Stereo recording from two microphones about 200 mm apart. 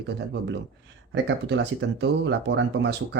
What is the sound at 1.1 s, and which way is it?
Speech, 60° right (ahead or behind).